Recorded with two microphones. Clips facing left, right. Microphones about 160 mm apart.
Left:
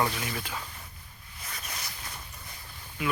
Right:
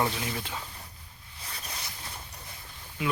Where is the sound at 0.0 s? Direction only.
25° right (ahead or behind).